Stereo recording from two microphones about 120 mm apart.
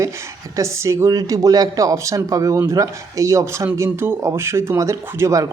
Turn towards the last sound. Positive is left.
turn(degrees=-25)  # may be behind; listen again after turning